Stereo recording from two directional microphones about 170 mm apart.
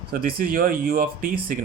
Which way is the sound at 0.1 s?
60° right (ahead or behind).